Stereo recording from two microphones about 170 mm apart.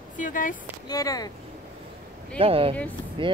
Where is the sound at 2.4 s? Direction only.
35° right (ahead or behind).